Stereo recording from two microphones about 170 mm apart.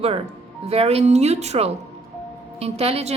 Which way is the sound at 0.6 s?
35° right (ahead or behind).